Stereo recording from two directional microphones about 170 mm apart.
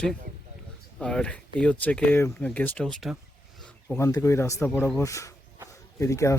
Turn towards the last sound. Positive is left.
turn(degrees=15)  # may be behind; listen again after turning